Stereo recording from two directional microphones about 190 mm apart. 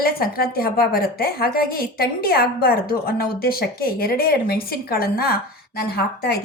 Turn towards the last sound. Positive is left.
turn(degrees=55)  # may be behind; listen again after turning